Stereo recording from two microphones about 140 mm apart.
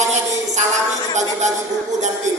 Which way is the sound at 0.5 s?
55° right (ahead or behind).